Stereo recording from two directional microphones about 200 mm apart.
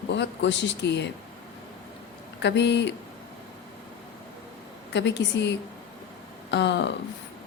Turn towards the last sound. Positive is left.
turn(degrees=60)  # may be behind; listen again after turning